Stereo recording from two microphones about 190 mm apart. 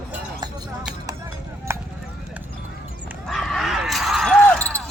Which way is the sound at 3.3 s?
Centre (ahead or behind).